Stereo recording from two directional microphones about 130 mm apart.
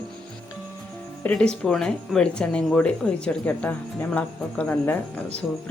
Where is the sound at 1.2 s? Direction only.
10° left (ahead or behind).